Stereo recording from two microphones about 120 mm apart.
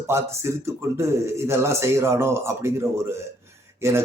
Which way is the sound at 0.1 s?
20° right (ahead or behind).